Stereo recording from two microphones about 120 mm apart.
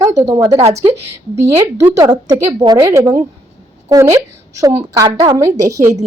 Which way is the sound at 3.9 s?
25° right (ahead or behind).